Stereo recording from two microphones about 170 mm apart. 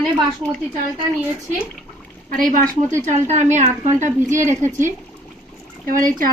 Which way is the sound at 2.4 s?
50° right (ahead or behind).